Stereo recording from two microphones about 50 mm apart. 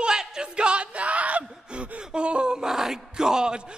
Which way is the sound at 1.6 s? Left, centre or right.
Right.